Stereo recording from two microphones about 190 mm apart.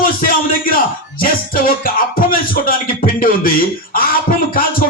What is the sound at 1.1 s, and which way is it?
Music, 50° left (ahead or behind).